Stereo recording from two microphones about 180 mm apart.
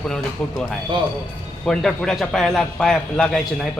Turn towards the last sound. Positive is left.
turn(degrees=0)  # may be behind; listen again after turning